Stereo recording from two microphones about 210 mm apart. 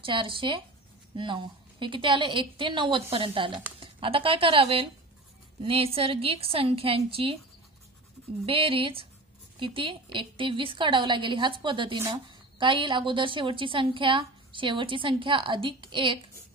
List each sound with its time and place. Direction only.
0.0 s a woman's voice: 25° right (ahead or behind)
8.5 s a woman's voice: 25° right (ahead or behind)